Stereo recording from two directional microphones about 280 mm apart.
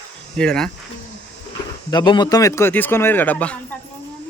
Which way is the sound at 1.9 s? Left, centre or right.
Centre.